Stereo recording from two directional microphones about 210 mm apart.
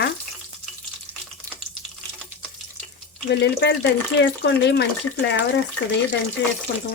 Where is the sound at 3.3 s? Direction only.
55° left (ahead or behind).